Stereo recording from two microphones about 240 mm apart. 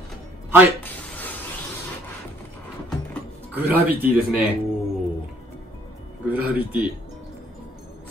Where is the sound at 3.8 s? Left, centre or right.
Right.